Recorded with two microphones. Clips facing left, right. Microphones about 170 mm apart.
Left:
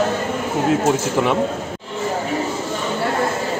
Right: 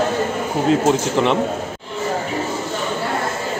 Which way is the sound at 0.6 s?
5° left (ahead or behind).